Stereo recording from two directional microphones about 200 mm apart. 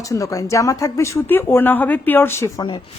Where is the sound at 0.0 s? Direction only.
15° left (ahead or behind).